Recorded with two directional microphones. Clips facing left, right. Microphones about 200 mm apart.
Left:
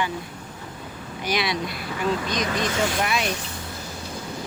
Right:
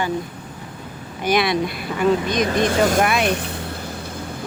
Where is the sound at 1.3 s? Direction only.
55° right (ahead or behind).